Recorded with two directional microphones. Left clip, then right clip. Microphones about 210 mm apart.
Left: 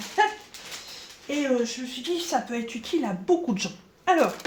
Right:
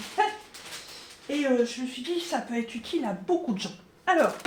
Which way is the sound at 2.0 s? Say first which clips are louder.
Left 4 dB; 45° left (ahead or behind).